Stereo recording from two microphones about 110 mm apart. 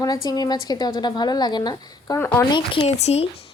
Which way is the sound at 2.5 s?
50° left (ahead or behind).